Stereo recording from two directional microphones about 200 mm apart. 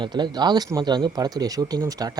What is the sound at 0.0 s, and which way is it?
Speech, 20° right (ahead or behind).